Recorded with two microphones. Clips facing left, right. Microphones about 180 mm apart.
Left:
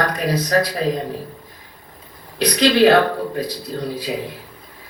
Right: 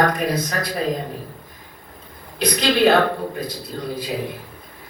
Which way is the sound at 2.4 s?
50° right (ahead or behind).